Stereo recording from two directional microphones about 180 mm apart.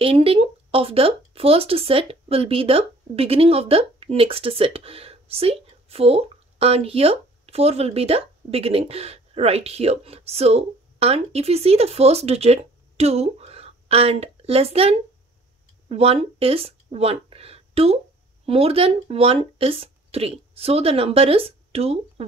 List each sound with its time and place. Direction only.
0.0 s speech: 30° right (ahead or behind)